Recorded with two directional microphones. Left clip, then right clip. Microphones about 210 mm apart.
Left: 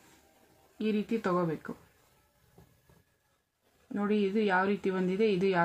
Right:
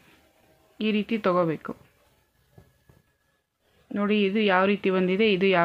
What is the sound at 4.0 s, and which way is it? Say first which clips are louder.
Speech: right 6 dB; 35° right (ahead or behind).